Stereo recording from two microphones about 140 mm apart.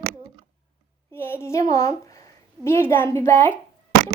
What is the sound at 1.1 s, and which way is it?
A woman's voice, 15° left (ahead or behind).